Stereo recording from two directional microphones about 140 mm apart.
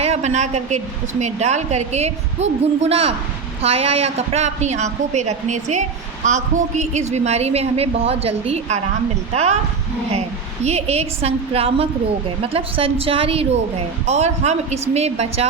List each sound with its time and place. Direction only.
0.0 s a woman's voice: 50° right (ahead or behind)